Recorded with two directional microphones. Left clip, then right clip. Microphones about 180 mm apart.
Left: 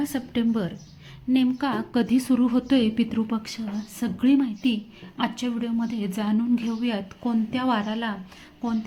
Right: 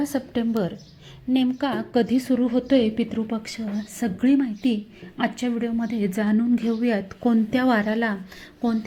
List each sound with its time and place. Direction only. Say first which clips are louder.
0.0 s a woman's voice: right 1 dB; centre (ahead or behind)
4.0 s a woman's voice: right 1 dB; centre (ahead or behind); by 8.2 s 20° right (ahead or behind)